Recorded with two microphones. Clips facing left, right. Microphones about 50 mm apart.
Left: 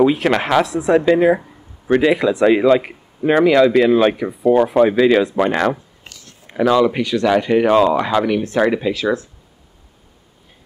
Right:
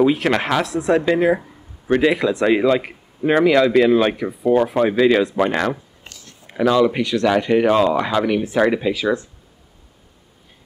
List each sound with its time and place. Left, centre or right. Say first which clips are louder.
0.0 s speech: left 2 dB; centre
4.4 s speech: left 3 dB; centre
4.6 s speech: left 3 dB; centre